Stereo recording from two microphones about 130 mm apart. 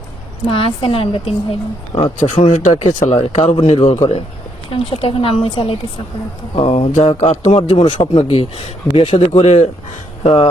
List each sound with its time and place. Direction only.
0.4 s a man's voice: 45° left (ahead or behind)
2.1 s a man's voice: 65° left (ahead or behind); by 10.5 s 45° left (ahead or behind)